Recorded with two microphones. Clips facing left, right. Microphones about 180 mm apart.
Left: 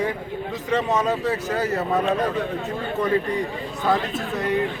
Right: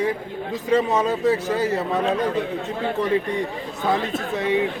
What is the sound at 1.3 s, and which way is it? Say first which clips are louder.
Speech: right 3 dB; 30° right (ahead or behind).